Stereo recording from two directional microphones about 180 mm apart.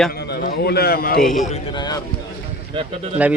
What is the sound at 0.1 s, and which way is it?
A man's voice, 60° left (ahead or behind).